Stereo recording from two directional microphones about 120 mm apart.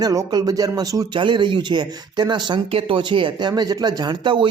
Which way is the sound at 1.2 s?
40° right (ahead or behind).